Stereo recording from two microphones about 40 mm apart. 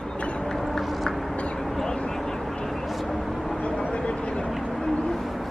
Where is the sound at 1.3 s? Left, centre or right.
Left.